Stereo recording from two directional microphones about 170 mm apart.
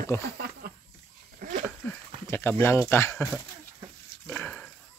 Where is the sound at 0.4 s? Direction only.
65° right (ahead or behind).